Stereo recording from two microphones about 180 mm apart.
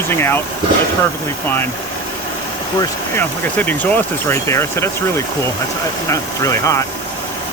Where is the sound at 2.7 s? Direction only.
10° left (ahead or behind).